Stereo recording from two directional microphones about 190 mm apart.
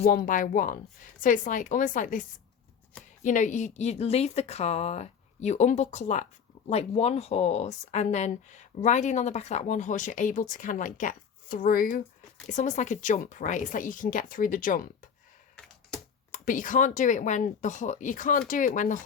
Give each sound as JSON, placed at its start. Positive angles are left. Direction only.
{"t": 0.0, "sound": "speech", "side_deg": 50}
{"t": 3.2, "sound": "speech", "side_deg": 40}
{"t": 15.5, "sound": "computer keyboard", "side_deg": 5}
{"t": 16.3, "sound": "speech", "side_deg": 45}